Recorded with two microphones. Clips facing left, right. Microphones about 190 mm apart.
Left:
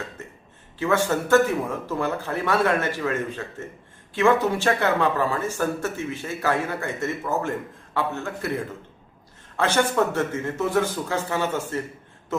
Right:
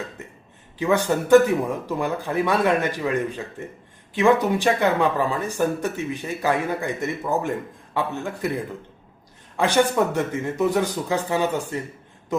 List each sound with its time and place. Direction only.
0.8 s speech: 15° right (ahead or behind)
9.6 s speech: 15° right (ahead or behind)